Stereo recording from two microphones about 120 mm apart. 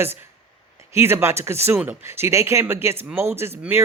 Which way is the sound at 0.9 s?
20° right (ahead or behind).